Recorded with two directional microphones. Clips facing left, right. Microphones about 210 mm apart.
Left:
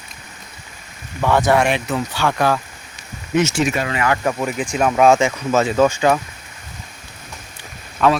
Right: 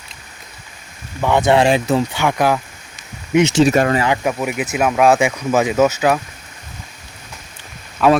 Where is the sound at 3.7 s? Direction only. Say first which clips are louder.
Right 8 dB; 45° right (ahead or behind).